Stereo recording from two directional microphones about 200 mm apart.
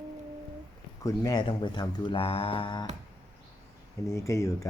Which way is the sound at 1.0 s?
20° left (ahead or behind).